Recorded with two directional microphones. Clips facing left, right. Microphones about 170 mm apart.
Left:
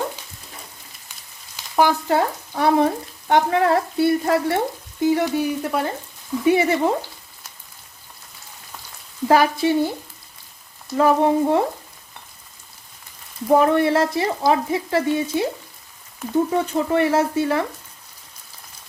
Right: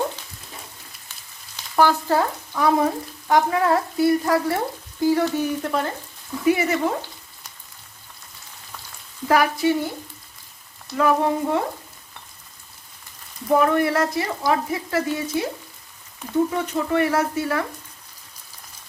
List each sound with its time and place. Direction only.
1.5 s frying: 15° left (ahead or behind)
2.6 s frying: 30° left (ahead or behind); by 5.9 s 10° left (ahead or behind)
6.4 s frying: 25° left (ahead or behind)
9.2 s frying: 25° left (ahead or behind)
10.9 s frying: 30° left (ahead or behind)
13.5 s frying: 30° left (ahead or behind)
16.6 s frying: 30° left (ahead or behind)